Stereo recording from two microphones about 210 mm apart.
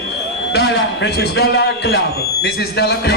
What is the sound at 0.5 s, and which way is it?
A man's voice, 55° left (ahead or behind).